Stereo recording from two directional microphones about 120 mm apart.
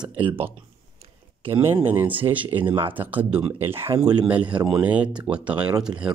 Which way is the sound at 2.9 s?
15° right (ahead or behind).